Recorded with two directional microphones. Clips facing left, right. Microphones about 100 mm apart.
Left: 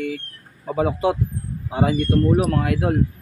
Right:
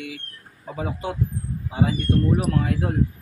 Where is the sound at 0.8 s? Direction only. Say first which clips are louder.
Left 9 dB; 90° left.